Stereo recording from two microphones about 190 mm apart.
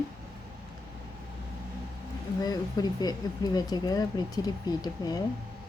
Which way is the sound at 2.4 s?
20° left (ahead or behind).